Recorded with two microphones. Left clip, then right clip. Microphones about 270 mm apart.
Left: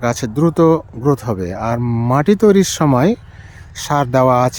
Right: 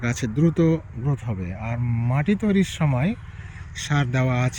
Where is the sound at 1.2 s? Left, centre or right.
Left.